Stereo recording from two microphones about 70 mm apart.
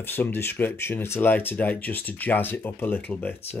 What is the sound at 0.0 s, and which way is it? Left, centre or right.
Speech, left.